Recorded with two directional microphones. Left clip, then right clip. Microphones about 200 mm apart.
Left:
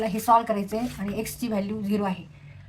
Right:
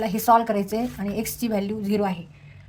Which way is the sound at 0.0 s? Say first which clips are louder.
Right 2 dB; 45° right (ahead or behind).